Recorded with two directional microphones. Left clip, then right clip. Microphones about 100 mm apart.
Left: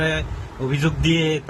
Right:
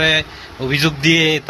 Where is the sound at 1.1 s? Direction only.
50° right (ahead or behind).